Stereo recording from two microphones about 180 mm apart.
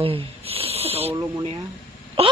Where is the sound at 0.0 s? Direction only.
30° right (ahead or behind).